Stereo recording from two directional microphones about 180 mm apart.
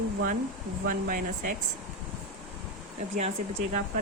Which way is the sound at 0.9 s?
50° right (ahead or behind).